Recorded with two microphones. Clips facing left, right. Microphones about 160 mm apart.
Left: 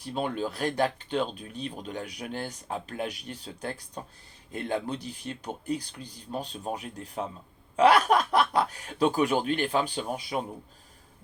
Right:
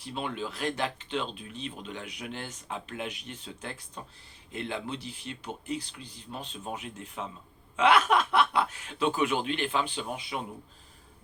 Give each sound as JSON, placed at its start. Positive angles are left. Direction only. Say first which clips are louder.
{"t": 0.0, "sound": "speech", "louder": "left 4 dB", "side_deg": 45}